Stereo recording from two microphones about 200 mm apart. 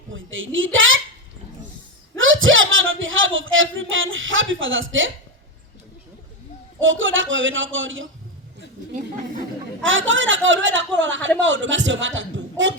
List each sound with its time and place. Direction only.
0.1 s a woman's voice: 75° right (ahead or behind)
2.1 s a sound: 80° right
6.7 s a woman's voice: 75° right (ahead or behind)
9.8 s a woman's voice: 70° right (ahead or behind)